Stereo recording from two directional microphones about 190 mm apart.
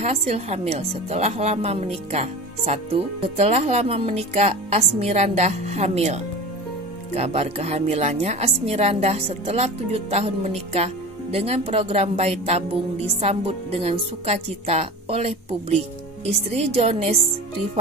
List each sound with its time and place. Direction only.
0.0 s a woman's voice: 35° right (ahead or behind)